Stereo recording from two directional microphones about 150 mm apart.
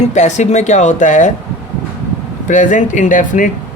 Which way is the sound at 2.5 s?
55° left (ahead or behind).